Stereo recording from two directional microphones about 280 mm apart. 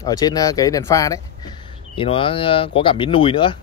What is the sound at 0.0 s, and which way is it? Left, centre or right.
Speech, centre.